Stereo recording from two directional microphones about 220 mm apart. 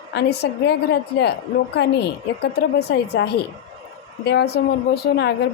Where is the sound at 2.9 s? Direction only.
50° left (ahead or behind).